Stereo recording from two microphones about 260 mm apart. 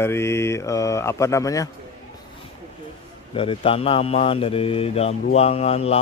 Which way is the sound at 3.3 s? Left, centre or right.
Left.